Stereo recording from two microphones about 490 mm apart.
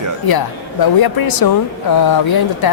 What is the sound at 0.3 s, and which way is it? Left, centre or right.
Speech, left.